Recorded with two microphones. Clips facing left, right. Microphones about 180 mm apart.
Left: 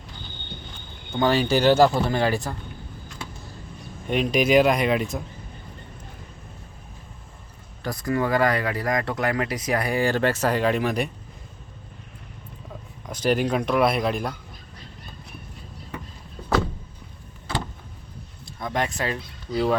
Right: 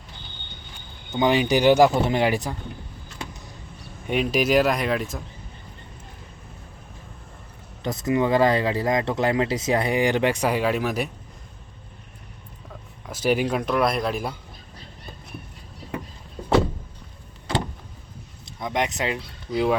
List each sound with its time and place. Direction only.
1.2 s speech: 15° right (ahead or behind)
4.0 s speech: 5° right (ahead or behind)
7.8 s speech: 20° right (ahead or behind); by 11.1 s 5° right (ahead or behind)
13.1 s speech: 5° right (ahead or behind)
18.6 s speech: 20° right (ahead or behind)